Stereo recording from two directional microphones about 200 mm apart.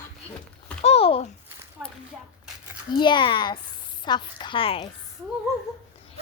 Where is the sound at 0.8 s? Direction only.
30° left (ahead or behind).